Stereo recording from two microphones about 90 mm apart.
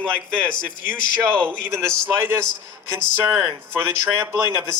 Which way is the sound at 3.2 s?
25° right (ahead or behind).